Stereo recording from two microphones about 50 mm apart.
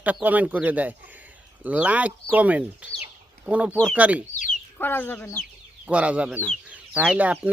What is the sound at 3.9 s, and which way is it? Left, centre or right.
Speech, right.